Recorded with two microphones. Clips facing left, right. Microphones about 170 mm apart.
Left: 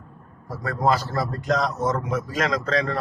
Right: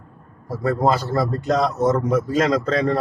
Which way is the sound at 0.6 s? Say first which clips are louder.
Right 3 dB; 30° right (ahead or behind).